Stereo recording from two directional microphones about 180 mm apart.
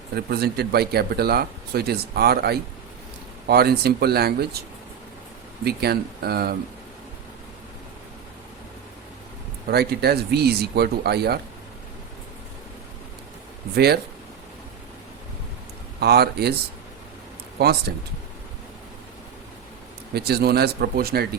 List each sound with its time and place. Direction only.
0.2 s speech: 60° right (ahead or behind)
5.6 s speech: 60° right (ahead or behind)
9.6 s speech: 60° right (ahead or behind)
13.7 s speech: 60° right (ahead or behind)
16.0 s speech: 60° right (ahead or behind)
17.6 s speech: 60° right (ahead or behind)
20.1 s speech: 60° right (ahead or behind)